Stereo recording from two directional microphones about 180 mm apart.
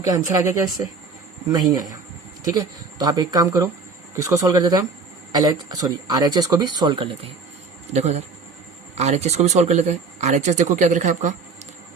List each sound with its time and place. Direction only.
0.0 s speech: 20° right (ahead or behind)
7.9 s speech: 40° right (ahead or behind)